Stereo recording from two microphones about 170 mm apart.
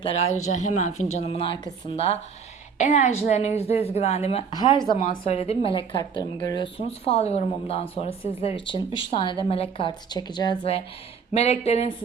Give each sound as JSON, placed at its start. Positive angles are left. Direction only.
{"t": 0.0, "sound": "speech", "side_deg": 35}
{"t": 2.7, "sound": "a woman's voice", "side_deg": 45}
{"t": 6.7, "sound": "a woman's voice", "side_deg": 35}
{"t": 11.3, "sound": "speech", "side_deg": 40}